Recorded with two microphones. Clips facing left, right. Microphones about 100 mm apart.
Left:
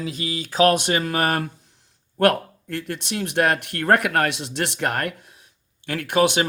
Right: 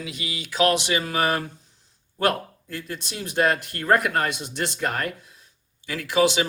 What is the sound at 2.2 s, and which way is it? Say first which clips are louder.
Speech: left 5 dB; 65° left (ahead or behind).